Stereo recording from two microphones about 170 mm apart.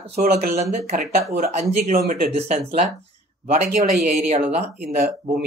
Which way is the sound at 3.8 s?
45° right (ahead or behind).